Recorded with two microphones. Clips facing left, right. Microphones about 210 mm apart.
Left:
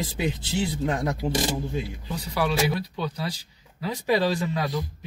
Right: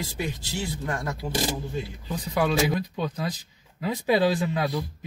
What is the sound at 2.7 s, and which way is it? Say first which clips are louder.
Speech: right 1 dB; 20° right (ahead or behind).